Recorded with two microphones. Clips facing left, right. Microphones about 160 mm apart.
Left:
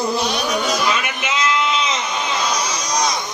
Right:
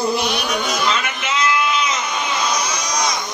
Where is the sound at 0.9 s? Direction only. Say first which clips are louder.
Even; 15° left (ahead or behind).